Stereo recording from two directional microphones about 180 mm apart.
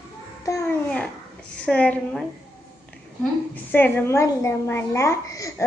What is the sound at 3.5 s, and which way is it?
A woman's voice, 10° left (ahead or behind).